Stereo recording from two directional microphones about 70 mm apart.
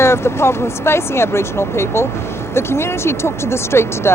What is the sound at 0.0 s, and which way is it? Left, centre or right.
Speech, left.